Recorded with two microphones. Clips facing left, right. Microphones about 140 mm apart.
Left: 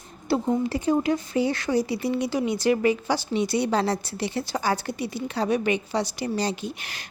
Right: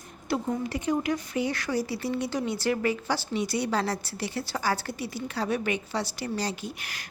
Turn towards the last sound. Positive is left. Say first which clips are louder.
# left 4 dB
turn(degrees=25)  # may be behind; listen again after turning